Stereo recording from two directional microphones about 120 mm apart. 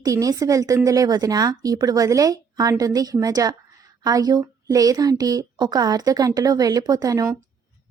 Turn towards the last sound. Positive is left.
turn(degrees=-30)  # may be behind; listen again after turning